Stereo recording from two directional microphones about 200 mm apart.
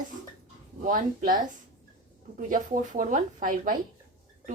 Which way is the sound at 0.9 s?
45° right (ahead or behind).